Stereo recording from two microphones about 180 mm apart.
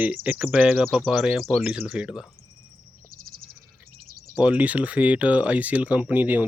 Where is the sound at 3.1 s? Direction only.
55° right (ahead or behind).